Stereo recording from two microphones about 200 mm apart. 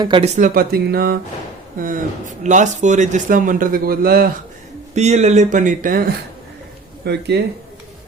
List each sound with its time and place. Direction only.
0.0 s speech: 25° right (ahead or behind)
0.3 s a man's voice: 45° right (ahead or behind)
4.9 s a man's voice: 35° right (ahead or behind)
7.0 s speech: 55° right (ahead or behind)